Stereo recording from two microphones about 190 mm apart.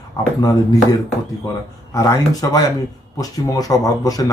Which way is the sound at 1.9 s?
15° left (ahead or behind).